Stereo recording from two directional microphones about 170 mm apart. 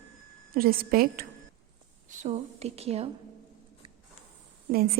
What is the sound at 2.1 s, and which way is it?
Speech, 45° right (ahead or behind).